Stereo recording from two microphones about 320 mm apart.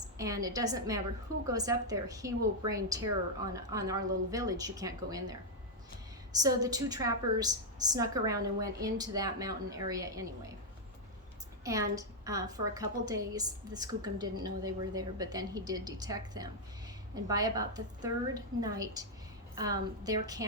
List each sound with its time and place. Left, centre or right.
0.2 s a woman's voice: centre
6.3 s a woman's voice: centre
11.6 s a woman's voice: centre